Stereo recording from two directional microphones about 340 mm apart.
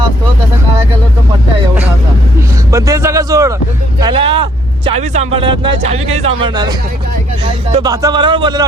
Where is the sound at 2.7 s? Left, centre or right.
Centre.